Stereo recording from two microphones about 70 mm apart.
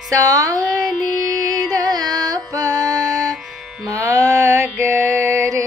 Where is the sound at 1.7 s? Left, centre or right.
Right.